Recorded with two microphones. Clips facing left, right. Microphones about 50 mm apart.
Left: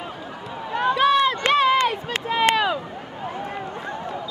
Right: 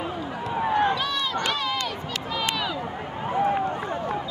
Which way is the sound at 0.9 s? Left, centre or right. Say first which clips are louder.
Left 9 dB; left.